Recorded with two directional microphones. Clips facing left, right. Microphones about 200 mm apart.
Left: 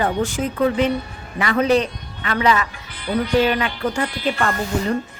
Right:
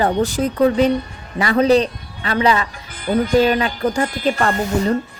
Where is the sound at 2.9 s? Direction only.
45° right (ahead or behind).